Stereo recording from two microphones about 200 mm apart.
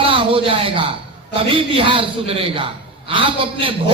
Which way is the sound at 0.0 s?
25° right (ahead or behind).